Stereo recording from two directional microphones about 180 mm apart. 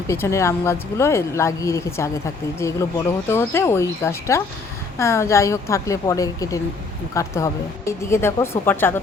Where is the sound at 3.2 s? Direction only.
15° left (ahead or behind).